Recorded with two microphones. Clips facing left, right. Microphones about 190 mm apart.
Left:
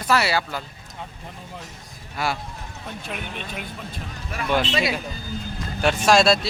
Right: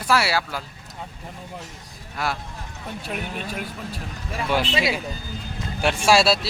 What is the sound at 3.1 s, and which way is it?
Speech, 45° right (ahead or behind).